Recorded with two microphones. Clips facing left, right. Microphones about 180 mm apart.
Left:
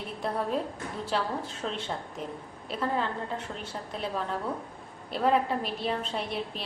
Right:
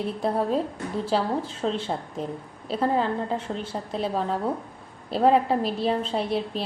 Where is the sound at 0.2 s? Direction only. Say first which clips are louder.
Right 4 dB; 30° right (ahead or behind).